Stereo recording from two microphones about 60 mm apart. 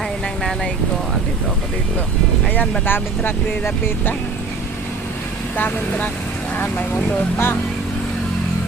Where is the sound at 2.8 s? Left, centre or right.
Left.